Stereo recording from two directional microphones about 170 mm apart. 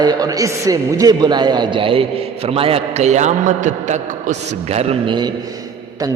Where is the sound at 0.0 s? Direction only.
20° right (ahead or behind).